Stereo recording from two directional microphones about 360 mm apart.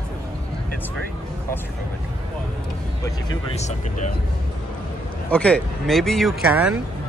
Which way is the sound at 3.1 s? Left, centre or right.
Centre.